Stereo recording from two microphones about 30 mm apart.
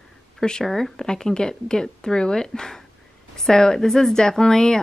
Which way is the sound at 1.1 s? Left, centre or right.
Left.